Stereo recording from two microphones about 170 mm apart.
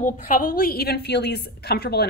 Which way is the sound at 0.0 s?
50° left (ahead or behind).